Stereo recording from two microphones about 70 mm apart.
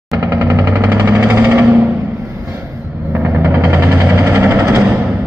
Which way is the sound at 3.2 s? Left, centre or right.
Right.